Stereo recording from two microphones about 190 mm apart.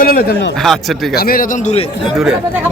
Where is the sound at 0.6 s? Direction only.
Centre (ahead or behind).